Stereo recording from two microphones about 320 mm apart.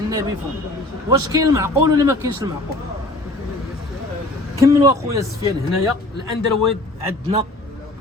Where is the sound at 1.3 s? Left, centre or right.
Centre.